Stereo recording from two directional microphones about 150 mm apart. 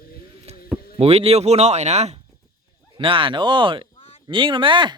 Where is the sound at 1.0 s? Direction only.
40° right (ahead or behind).